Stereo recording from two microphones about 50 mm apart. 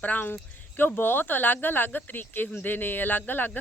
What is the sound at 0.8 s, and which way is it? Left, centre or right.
Speech, left.